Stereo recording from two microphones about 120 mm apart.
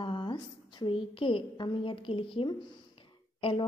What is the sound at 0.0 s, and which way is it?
A woman's voice, 45° left (ahead or behind).